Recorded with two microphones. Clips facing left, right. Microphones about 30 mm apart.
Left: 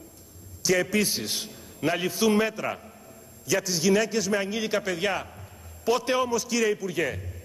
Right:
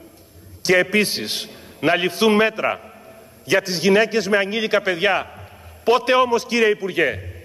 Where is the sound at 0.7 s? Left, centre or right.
Right.